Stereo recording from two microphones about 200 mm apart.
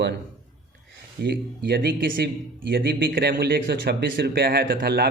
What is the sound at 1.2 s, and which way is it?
A man's voice, 55° right (ahead or behind).